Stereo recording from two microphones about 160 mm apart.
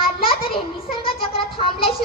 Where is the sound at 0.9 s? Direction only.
35° left (ahead or behind).